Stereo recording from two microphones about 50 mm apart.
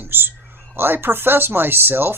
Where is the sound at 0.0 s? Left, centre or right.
Right.